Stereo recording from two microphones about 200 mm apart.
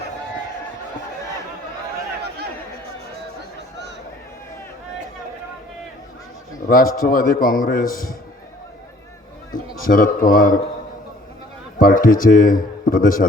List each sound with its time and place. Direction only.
6.7 s a man's voice: 45° left (ahead or behind)
9.8 s a man's voice: 45° left (ahead or behind)
11.8 s a man's voice: 45° left (ahead or behind)